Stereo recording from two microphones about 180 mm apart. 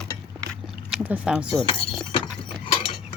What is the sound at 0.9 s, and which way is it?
Speech, 5° right (ahead or behind).